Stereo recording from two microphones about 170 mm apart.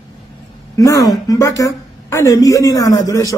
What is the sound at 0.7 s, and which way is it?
A woman's voice, 20° left (ahead or behind).